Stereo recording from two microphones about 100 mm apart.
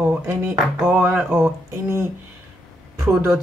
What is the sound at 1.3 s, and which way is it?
Speech, 25° right (ahead or behind).